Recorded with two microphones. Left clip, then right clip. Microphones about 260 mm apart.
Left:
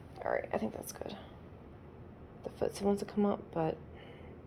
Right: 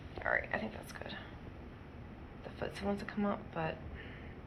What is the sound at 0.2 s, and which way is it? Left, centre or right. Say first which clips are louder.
Speech: even; left.